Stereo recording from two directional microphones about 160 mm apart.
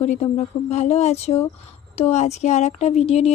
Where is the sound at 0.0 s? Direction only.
45° left (ahead or behind).